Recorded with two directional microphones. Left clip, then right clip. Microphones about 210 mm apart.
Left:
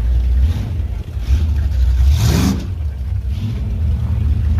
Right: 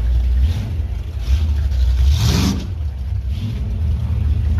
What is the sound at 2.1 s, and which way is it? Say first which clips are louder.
Vehicle: left 1 dB; 50° left (ahead or behind).